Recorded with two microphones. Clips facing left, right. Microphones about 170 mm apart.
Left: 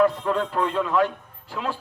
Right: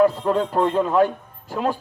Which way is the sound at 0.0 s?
40° right (ahead or behind).